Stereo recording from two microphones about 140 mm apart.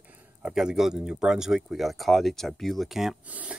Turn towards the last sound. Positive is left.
turn(degrees=-10)  # may be behind; listen again after turning